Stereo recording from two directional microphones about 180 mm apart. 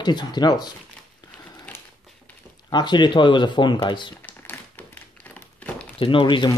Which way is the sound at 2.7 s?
25° left (ahead or behind).